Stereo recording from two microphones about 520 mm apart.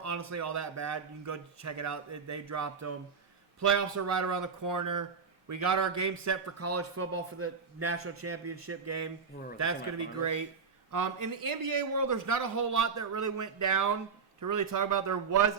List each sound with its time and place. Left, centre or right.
0.0 s a man's voice: right
10.2 s a man's voice: right